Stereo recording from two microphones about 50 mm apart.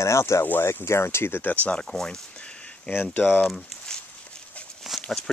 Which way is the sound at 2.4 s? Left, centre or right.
Left.